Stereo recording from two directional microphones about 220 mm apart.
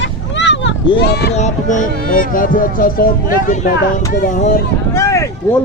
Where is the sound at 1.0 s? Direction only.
50° left (ahead or behind).